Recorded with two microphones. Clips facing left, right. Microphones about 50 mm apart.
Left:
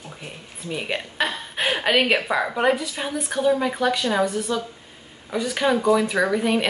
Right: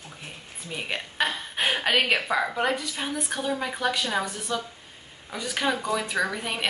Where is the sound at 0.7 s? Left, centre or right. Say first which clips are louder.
Left 3 dB; centre.